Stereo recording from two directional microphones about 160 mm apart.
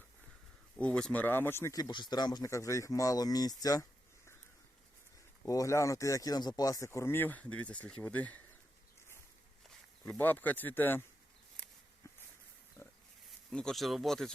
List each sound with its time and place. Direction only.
0.8 s speech: 5° left (ahead or behind); by 3.8 s 20° left (ahead or behind)
5.5 s speech: 20° left (ahead or behind)
10.1 s speech: 10° left (ahead or behind)
12.8 s pig: 15° left (ahead or behind)
13.5 s speech: 5° left (ahead or behind)